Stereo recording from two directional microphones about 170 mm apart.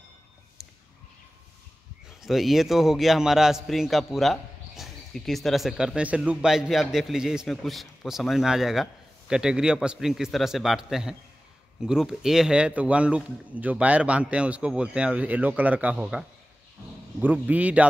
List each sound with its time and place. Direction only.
2.0 s a man's voice: centre (ahead or behind)